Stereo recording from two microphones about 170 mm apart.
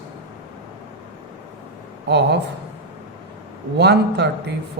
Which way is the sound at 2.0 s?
80° right.